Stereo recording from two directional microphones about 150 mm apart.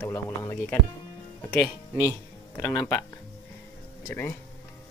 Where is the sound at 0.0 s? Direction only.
15° left (ahead or behind).